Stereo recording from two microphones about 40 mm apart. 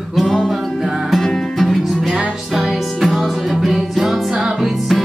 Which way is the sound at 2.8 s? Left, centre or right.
Centre.